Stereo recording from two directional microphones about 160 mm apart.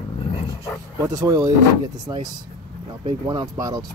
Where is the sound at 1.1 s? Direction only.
25° right (ahead or behind).